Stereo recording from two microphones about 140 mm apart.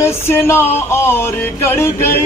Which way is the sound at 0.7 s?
15° left (ahead or behind).